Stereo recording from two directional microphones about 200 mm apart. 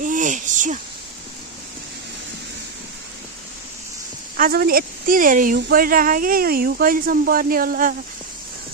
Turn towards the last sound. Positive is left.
turn(degrees=-45)  # may be behind; listen again after turning